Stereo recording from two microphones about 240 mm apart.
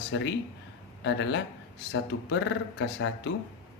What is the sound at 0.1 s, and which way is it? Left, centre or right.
Speech, left.